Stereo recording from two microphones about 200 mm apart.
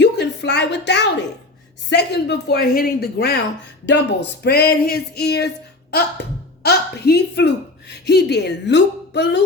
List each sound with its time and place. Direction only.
0.0 s a sound: 60° left (ahead or behind)
1.9 s speech: 55° left (ahead or behind)
6.6 s speech: 55° left (ahead or behind)